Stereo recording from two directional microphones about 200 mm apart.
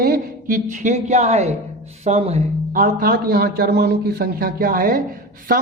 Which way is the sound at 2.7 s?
45° right (ahead or behind).